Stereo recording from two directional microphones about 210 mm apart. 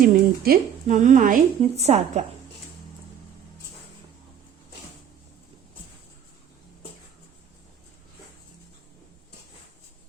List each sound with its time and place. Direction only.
0.0 s speech: 45° right (ahead or behind)